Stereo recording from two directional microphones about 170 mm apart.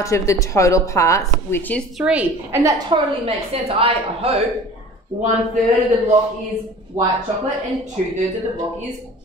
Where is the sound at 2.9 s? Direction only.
30° right (ahead or behind).